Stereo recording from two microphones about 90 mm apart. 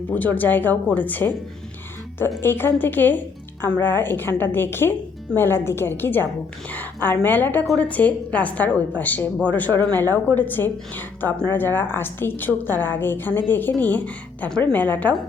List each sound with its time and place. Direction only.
0.1 s a woman's voice: 20° left (ahead or behind)
2.4 s a woman's voice: 25° left (ahead or behind)